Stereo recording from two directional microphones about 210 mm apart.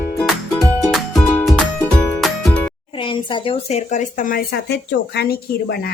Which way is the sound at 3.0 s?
25° left (ahead or behind).